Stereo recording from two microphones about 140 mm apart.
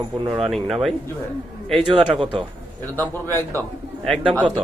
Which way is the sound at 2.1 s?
35° right (ahead or behind).